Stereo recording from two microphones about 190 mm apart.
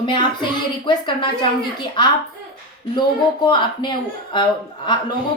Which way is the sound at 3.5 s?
25° left (ahead or behind).